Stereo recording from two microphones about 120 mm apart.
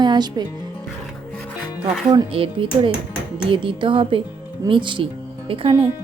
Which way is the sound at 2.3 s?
50° right (ahead or behind).